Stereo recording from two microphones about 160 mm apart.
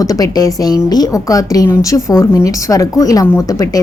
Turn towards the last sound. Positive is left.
turn(degrees=20)  # may be behind; listen again after turning